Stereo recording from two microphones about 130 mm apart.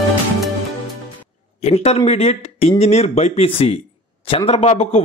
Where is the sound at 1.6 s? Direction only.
55° left (ahead or behind).